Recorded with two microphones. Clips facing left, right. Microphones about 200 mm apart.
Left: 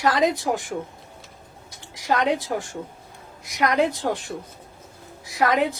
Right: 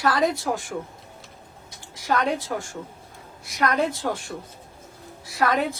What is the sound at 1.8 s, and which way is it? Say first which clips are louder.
A woman's voice: left 2 dB; 15° left (ahead or behind).